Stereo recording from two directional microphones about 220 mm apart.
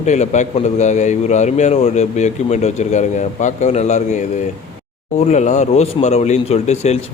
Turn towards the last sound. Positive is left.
turn(degrees=30)  # may be behind; listen again after turning